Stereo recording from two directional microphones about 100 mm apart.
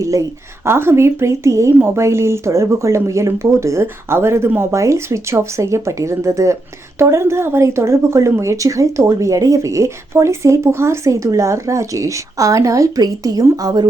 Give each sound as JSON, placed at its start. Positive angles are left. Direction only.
{"t": 0.0, "sound": "a woman's voice", "side_deg": -30}